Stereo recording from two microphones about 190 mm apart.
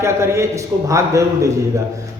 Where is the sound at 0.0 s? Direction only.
15° right (ahead or behind).